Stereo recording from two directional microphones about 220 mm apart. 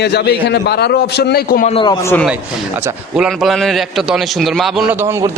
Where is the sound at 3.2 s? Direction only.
Centre (ahead or behind).